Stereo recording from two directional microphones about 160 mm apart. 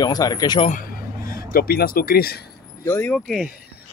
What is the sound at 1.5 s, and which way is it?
Speech, 70° left (ahead or behind).